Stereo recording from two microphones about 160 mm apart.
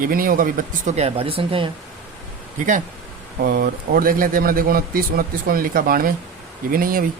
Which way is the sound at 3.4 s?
70° right (ahead or behind).